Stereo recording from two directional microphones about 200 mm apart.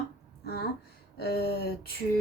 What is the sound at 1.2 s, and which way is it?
Speech, 55° left (ahead or behind).